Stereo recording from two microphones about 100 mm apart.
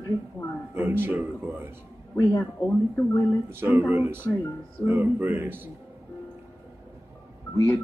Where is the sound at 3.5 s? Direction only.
20° right (ahead or behind).